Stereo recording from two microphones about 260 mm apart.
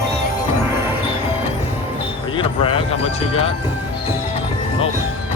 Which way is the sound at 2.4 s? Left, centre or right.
Centre.